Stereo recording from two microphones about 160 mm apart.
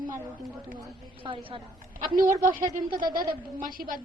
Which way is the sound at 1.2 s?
35° right (ahead or behind).